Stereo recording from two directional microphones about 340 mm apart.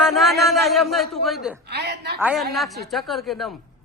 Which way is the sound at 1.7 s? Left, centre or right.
Right.